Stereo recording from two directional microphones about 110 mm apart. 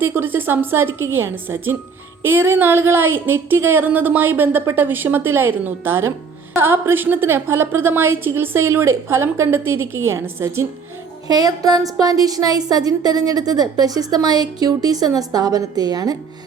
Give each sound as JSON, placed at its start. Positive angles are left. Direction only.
{"t": 0.0, "sound": "a woman's voice", "side_deg": -20}